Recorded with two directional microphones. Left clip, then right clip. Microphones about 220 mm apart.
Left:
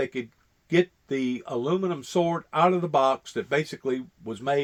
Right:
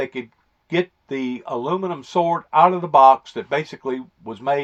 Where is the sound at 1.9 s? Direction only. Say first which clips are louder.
Right 6 dB; 45° left (ahead or behind).